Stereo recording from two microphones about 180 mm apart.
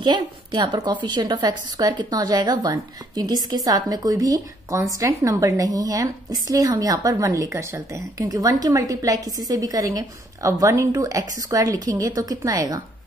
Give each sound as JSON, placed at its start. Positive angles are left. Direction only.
{"t": 0.0, "sound": "a woman's voice", "side_deg": -25}